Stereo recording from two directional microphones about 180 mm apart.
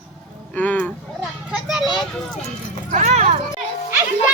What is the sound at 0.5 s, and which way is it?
Speech, 10° left (ahead or behind).